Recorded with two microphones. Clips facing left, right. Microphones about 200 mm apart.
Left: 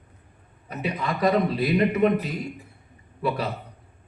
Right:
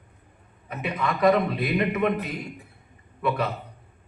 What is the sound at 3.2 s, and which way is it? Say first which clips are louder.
Speech: right 1 dB; 35° left (ahead or behind).